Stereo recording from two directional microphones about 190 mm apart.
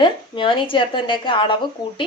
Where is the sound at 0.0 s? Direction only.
25° left (ahead or behind).